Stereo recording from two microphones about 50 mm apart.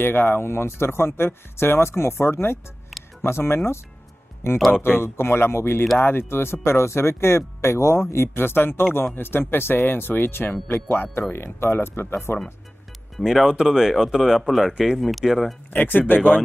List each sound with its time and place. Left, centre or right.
0.0 s speech: left
4.8 s speech: left
13.2 s speech: centre
14.7 s speech: centre
15.0 s speech: centre
15.7 s speech: left